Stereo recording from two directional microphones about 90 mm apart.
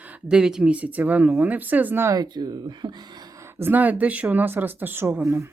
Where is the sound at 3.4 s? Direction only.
25° right (ahead or behind).